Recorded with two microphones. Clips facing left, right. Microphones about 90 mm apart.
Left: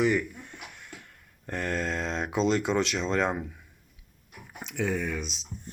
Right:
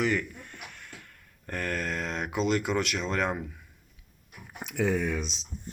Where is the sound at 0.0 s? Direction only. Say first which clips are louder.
Left 3 dB; 20° left (ahead or behind).